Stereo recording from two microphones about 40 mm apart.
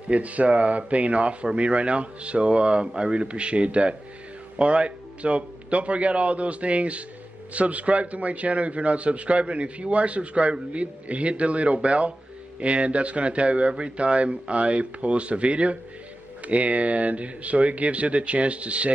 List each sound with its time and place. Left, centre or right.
0.1 s a man's voice: right